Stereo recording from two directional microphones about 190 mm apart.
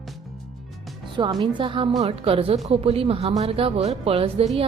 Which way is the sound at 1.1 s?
25° right (ahead or behind).